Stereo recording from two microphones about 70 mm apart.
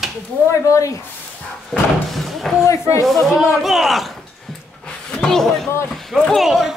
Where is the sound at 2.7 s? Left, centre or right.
Left.